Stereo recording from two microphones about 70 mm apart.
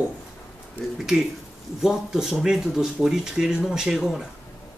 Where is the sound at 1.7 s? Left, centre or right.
Centre.